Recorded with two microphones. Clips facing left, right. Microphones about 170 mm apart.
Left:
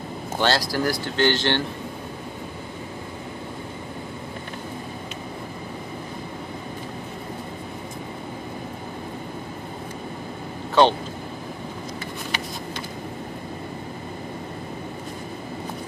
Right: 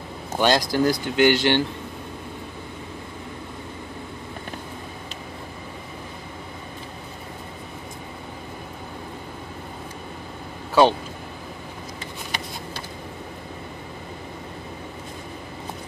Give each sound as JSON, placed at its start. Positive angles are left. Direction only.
{"t": 0.4, "sound": "speech", "side_deg": -20}
{"t": 10.7, "sound": "vehicle", "side_deg": -10}